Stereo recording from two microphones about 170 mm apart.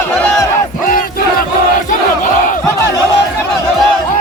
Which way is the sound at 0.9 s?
55° left (ahead or behind).